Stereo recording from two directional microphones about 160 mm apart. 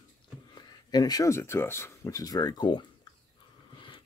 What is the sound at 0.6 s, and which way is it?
Speech, 25° left (ahead or behind).